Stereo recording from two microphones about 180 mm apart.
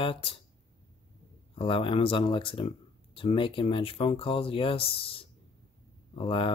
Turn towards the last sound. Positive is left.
turn(degrees=30)  # may be behind; listen again after turning